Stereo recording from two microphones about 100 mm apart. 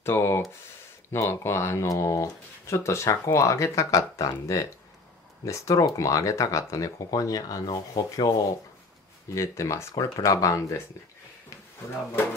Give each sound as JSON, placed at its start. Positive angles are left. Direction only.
{"t": 0.0, "sound": "speech", "side_deg": 25}
{"t": 9.3, "sound": "speech", "side_deg": 30}